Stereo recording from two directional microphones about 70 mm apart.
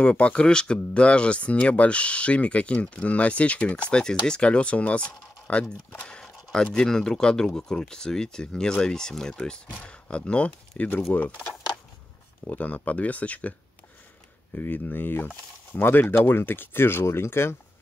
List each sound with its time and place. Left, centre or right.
0.0 s speech: centre; by 17.6 s left